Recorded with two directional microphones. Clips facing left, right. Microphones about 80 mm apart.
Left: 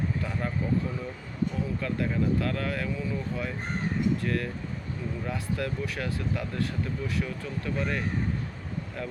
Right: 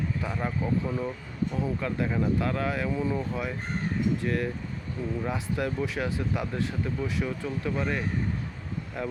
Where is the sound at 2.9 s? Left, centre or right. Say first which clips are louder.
Right 4 dB; right.